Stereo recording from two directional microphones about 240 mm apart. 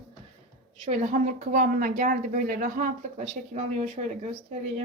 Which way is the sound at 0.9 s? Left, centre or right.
Right.